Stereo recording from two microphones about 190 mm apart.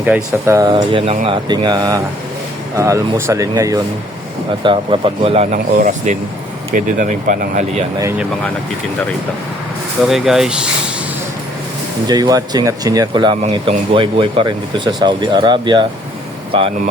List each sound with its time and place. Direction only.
0.4 s speech: 15° right (ahead or behind); by 7.9 s 40° right (ahead or behind)
10.0 s speech: centre (ahead or behind)
12.0 s speech: 20° right (ahead or behind)